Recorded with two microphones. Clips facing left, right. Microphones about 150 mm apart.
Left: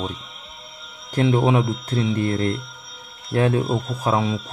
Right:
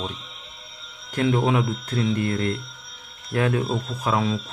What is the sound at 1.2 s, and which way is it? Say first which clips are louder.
A man's voice: left 3 dB; 25° left (ahead or behind).